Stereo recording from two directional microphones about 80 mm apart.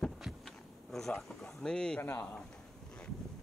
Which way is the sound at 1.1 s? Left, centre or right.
Centre.